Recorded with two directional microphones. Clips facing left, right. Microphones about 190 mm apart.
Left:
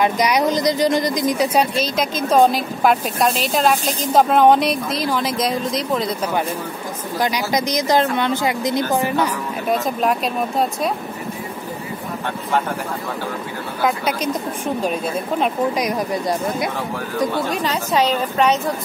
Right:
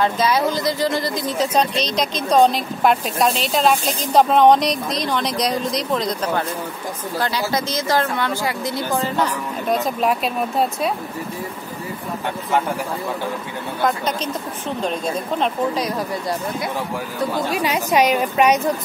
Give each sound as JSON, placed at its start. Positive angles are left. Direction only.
{"t": 0.0, "sound": "speech", "side_deg": 15}
{"t": 9.7, "sound": "speech", "side_deg": 0}
{"t": 13.8, "sound": "speech", "side_deg": 10}
{"t": 17.5, "sound": "a woman's voice", "side_deg": -10}